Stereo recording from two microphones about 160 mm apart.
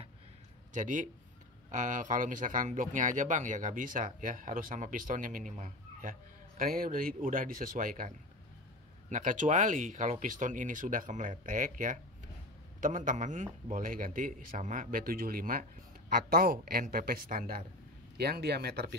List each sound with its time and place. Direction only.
0.7 s a man's voice: 50° right (ahead or behind)
9.1 s a man's voice: 55° right (ahead or behind)
18.1 s speech: 85° right